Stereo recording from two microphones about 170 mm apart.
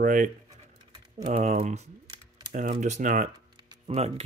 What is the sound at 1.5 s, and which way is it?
Speech, 45° right (ahead or behind).